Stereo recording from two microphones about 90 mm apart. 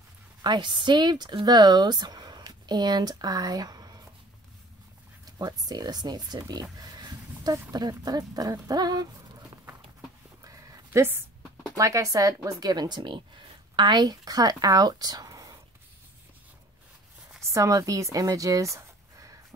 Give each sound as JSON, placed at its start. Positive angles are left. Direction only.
{"t": 0.4, "sound": "speech", "side_deg": -55}
{"t": 5.4, "sound": "speech", "side_deg": -50}
{"t": 10.4, "sound": "a sound", "side_deg": -40}
{"t": 11.7, "sound": "speech", "side_deg": -40}
{"t": 17.4, "sound": "speech", "side_deg": -35}